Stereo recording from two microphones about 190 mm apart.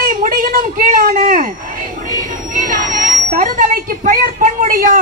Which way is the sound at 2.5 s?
45° right (ahead or behind).